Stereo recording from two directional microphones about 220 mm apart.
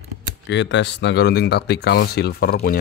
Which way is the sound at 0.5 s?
55° left (ahead or behind).